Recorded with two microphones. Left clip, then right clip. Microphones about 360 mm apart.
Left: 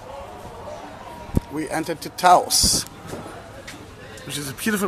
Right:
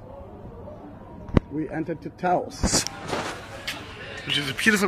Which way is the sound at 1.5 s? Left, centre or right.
Left.